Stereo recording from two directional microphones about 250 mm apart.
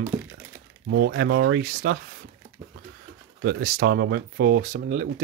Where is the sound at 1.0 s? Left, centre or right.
Right.